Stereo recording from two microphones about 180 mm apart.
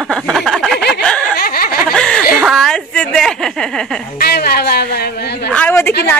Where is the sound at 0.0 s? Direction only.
Centre (ahead or behind).